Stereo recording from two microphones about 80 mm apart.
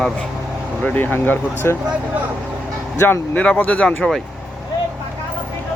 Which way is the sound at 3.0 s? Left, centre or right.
Left.